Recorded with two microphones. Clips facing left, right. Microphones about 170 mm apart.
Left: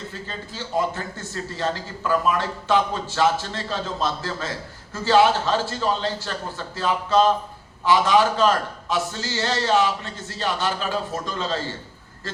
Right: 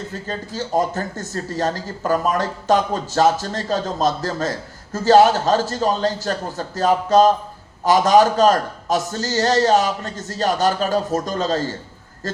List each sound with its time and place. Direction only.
0.1 s speech: 40° right (ahead or behind)